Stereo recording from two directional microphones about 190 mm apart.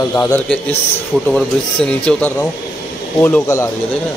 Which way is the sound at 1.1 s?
Centre (ahead or behind).